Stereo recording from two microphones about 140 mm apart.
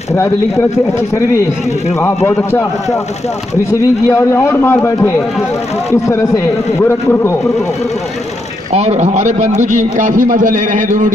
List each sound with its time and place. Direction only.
0.1 s a man's voice: 20° left (ahead or behind)
4.1 s a man's voice: 20° left (ahead or behind)
8.7 s a man's voice: 55° right (ahead or behind); by 11.1 s 70° right (ahead or behind)